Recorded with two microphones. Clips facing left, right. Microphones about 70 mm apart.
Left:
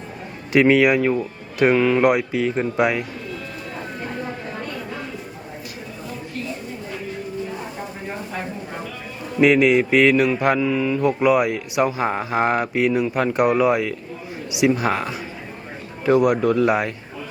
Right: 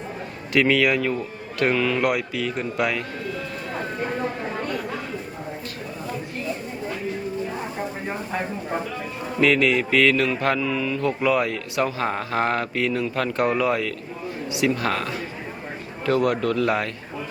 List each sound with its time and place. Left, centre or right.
0.5 s speech: left
9.4 s mantra: centre